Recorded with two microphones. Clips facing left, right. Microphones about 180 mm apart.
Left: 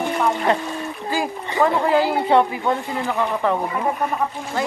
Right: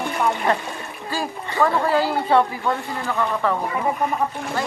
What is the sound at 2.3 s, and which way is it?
Speech, 20° left (ahead or behind).